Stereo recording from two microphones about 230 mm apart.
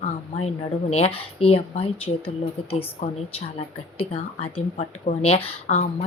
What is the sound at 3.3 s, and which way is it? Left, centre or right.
Speech, left.